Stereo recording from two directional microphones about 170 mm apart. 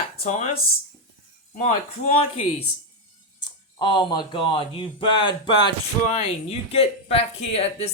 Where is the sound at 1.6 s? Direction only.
40° left (ahead or behind).